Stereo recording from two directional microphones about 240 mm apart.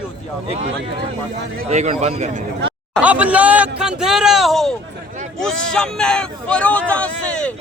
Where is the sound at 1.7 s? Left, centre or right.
Right.